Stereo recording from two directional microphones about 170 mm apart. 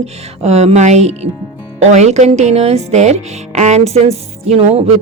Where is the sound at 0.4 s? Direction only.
40° right (ahead or behind).